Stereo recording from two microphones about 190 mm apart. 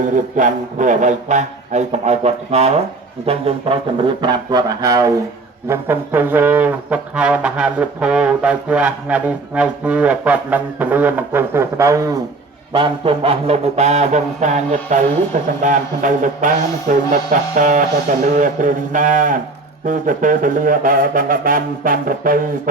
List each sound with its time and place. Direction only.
0.0 s speech: 40° right (ahead or behind); by 5.2 s 15° right (ahead or behind)
5.6 s brass instrument: 10° right (ahead or behind)
12.7 s speech: 30° right (ahead or behind)
15.6 s music: 45° right (ahead or behind)